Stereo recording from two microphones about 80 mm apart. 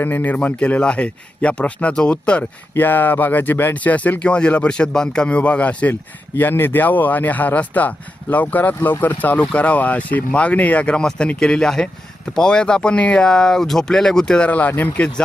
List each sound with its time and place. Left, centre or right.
0.0 s speech: left
2.7 s speech: left